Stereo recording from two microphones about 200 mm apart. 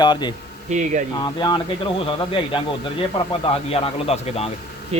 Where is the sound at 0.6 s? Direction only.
35° right (ahead or behind).